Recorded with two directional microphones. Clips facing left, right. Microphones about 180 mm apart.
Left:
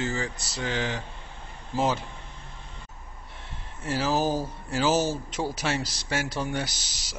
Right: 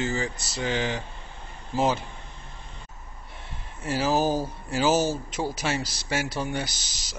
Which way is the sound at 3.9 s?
10° right (ahead or behind).